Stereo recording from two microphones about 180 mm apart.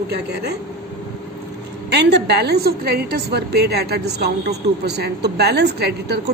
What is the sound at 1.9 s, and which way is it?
A woman's voice, 65° right (ahead or behind).